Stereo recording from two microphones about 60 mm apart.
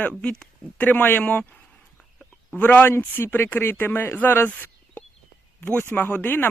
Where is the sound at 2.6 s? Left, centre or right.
Left.